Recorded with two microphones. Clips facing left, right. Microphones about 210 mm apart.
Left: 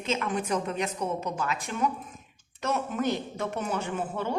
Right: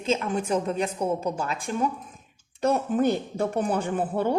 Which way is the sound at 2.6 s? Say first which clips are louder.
Right 6 dB; 35° right (ahead or behind).